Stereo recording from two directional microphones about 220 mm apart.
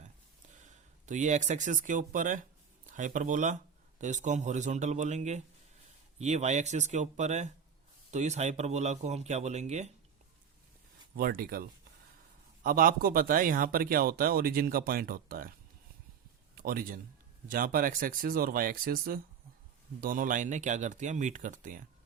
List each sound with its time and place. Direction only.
0.6 s speech: 35° right (ahead or behind)
11.2 s speech: 40° right (ahead or behind)
12.6 s speech: 40° right (ahead or behind)
16.6 s a man's voice: 40° right (ahead or behind)